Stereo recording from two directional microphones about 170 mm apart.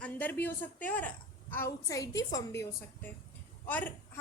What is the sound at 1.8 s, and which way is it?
A woman's voice, 20° left (ahead or behind).